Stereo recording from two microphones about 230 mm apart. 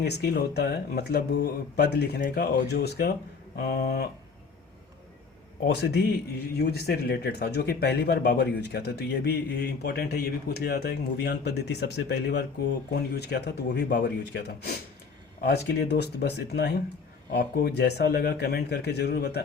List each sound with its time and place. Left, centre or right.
0.0 s speech: left
5.6 s speech: left